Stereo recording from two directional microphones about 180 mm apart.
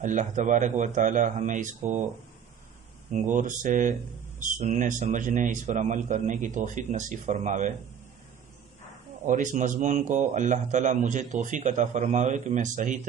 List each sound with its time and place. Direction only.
0.0 s a man's voice: 45° right (ahead or behind)
3.1 s a man's voice: 45° right (ahead or behind)
9.2 s a man's voice: 45° right (ahead or behind)